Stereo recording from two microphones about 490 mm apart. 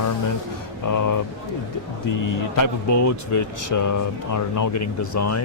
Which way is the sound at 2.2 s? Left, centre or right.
Left.